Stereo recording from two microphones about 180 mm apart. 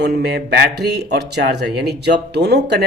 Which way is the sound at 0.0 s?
60° right (ahead or behind).